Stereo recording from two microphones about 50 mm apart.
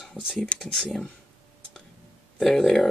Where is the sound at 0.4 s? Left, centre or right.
Centre.